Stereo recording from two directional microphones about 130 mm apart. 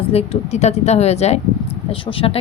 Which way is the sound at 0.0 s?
50° left (ahead or behind).